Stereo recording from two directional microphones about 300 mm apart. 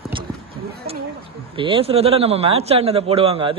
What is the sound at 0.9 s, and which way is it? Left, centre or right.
A man's voice, centre.